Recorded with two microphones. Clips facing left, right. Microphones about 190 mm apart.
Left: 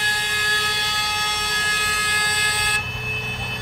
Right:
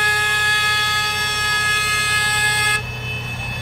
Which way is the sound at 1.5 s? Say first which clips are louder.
Right 2 dB; 65° right (ahead or behind).